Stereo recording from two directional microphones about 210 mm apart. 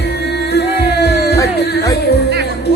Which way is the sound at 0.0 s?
50° left (ahead or behind).